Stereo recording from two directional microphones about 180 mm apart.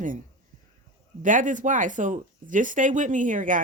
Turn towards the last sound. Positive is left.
turn(degrees=-45)  # may be behind; listen again after turning